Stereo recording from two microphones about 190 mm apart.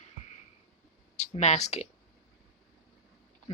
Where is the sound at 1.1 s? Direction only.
35° left (ahead or behind).